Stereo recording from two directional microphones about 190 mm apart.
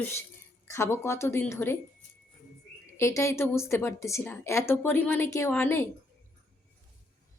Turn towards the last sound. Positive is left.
turn(degrees=10)  # may be behind; listen again after turning